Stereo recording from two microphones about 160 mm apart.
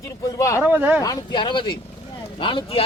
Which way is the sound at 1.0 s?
25° left (ahead or behind).